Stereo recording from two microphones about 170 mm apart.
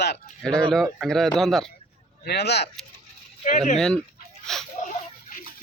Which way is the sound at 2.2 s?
75° left (ahead or behind).